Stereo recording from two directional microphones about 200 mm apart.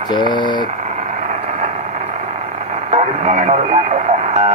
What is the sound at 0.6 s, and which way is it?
Vehicle, 35° right (ahead or behind).